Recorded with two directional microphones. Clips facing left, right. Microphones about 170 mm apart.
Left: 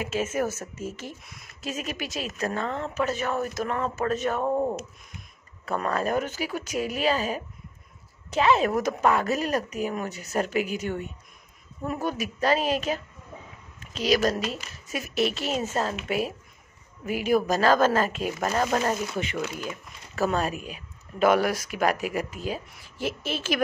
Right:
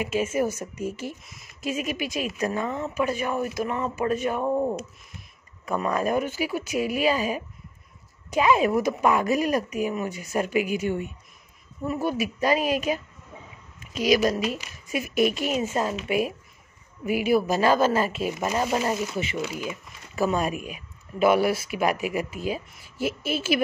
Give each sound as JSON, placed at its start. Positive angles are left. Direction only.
{"t": 0.1, "sound": "speech", "side_deg": -10}
{"t": 5.7, "sound": "speech", "side_deg": -15}